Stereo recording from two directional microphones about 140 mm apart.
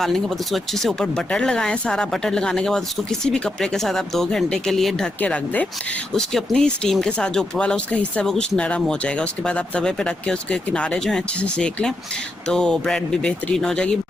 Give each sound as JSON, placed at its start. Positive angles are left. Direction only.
{"t": 0.0, "sound": "speech", "side_deg": 0}